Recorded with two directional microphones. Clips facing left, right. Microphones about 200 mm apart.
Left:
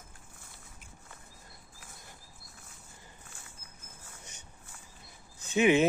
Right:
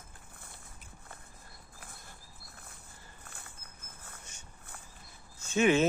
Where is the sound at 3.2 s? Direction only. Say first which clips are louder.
Right 2 dB; 60° right (ahead or behind).